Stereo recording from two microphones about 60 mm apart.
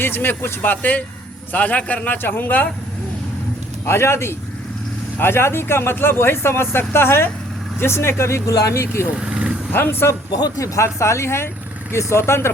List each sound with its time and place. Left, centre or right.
0.0 s a man's voice: left
3.8 s speech: left
9.2 s vehicle: centre
9.7 s speech: left
10.6 s speech: left